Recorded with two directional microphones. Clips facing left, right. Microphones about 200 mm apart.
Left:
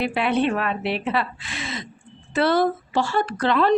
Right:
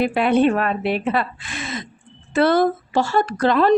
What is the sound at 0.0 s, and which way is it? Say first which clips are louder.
Speech: right 5 dB; 45° right (ahead or behind).